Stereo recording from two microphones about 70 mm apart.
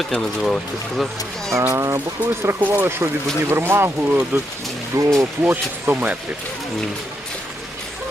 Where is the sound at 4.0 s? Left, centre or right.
Right.